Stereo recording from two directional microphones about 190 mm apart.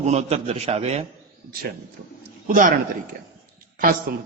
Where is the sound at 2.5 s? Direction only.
45° right (ahead or behind).